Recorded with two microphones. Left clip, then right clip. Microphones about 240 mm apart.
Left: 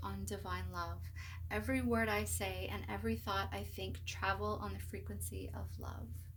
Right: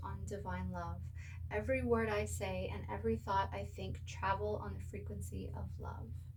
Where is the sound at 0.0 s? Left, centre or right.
Left.